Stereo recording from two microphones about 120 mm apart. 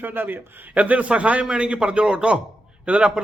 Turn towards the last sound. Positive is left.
turn(degrees=-10)  # may be behind; listen again after turning